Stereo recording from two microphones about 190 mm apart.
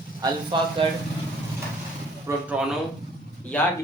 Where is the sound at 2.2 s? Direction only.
5° right (ahead or behind).